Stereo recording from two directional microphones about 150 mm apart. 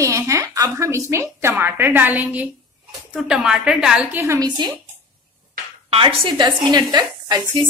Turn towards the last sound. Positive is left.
turn(degrees=-25)  # may be behind; listen again after turning